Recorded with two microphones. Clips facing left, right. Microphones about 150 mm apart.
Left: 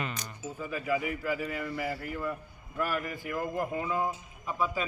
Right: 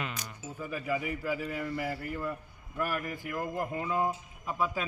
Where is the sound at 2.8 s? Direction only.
15° right (ahead or behind).